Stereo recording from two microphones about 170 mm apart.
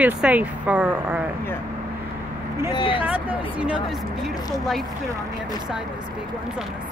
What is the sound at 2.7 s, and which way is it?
Speech, 30° left (ahead or behind).